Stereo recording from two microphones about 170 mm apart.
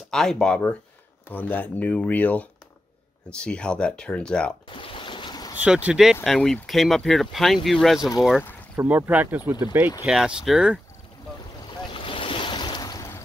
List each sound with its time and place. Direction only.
0.1 s speech: 5° left (ahead or behind)
4.6 s boat: 30° left (ahead or behind)
5.6 s speech: 5° right (ahead or behind)
10.0 s speech: centre (ahead or behind)
11.6 s waves: 30° left (ahead or behind)